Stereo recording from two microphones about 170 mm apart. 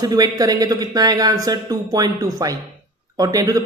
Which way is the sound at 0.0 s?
20° right (ahead or behind).